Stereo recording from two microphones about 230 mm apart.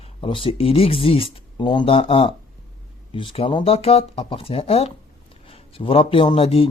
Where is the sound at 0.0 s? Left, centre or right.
Left.